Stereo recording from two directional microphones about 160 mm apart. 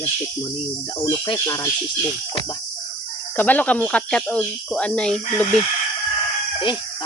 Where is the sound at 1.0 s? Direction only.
30° left (ahead or behind).